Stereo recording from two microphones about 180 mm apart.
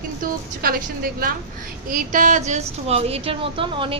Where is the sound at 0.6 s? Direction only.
55° right (ahead or behind).